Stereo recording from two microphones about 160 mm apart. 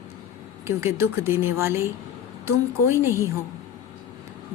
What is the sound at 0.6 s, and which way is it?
A woman's voice, 15° right (ahead or behind).